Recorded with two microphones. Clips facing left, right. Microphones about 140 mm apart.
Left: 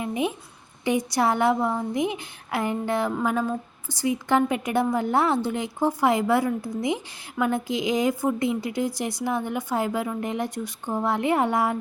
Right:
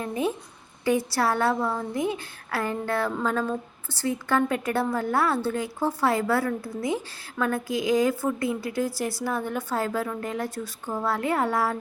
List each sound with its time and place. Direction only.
0.0 s a woman's voice: 15° left (ahead or behind)